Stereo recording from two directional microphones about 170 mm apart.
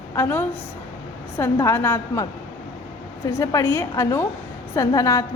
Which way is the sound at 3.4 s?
20° left (ahead or behind).